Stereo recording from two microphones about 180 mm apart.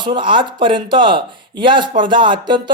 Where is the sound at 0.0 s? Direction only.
25° right (ahead or behind).